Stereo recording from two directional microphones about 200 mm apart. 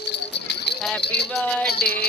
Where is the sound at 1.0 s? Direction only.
55° left (ahead or behind).